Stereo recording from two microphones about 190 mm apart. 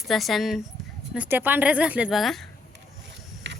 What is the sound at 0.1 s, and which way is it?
Speech, centre (ahead or behind).